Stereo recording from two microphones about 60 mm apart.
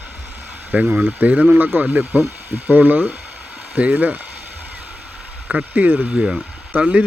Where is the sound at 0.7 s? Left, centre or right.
Right.